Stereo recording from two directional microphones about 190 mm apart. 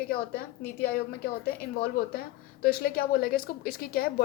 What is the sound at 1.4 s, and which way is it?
A woman's voice, 55° left (ahead or behind).